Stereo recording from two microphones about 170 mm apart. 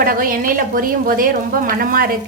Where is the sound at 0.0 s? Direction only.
55° right (ahead or behind).